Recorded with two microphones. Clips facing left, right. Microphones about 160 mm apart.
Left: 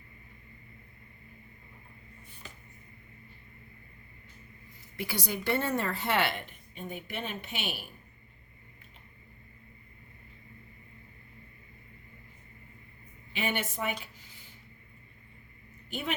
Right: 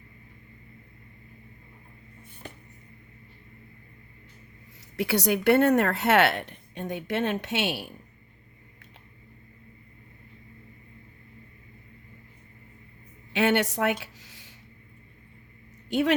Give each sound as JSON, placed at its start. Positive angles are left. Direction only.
{"t": 2.4, "sound": "music", "side_deg": -60}
{"t": 4.9, "sound": "a woman's voice", "side_deg": -70}
{"t": 13.3, "sound": "a woman's voice", "side_deg": -80}
{"t": 14.0, "sound": "a sound", "side_deg": -80}
{"t": 15.9, "sound": "a woman's voice", "side_deg": -85}